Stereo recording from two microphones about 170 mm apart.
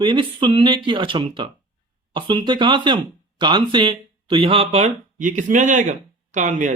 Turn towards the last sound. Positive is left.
turn(degrees=-45)  # may be behind; listen again after turning